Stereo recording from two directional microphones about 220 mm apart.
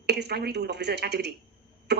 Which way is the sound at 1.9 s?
50° right (ahead or behind).